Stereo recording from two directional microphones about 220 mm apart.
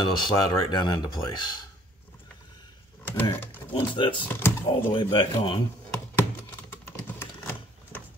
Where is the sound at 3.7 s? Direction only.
25° left (ahead or behind).